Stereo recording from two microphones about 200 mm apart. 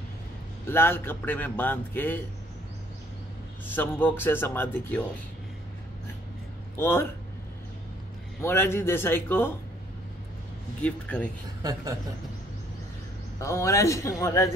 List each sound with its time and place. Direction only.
0.7 s a man's voice: 10° left (ahead or behind)
3.6 s a man's voice: 10° left (ahead or behind)
6.8 s a man's voice: 10° left (ahead or behind)
8.4 s a man's voice: 10° left (ahead or behind)
10.8 s a man's voice: 5° left (ahead or behind)
11.6 s a woman's voice: 20° right (ahead or behind)
13.4 s a man's voice: 15° left (ahead or behind)